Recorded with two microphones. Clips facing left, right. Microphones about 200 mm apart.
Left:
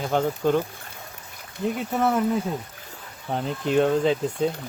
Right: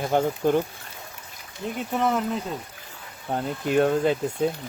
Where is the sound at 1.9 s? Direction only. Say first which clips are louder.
Even; 5° left (ahead or behind).